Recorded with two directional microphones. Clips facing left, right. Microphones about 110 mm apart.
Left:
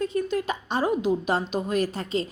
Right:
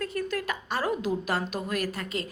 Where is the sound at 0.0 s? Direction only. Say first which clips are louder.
Left 5 dB; 20° left (ahead or behind).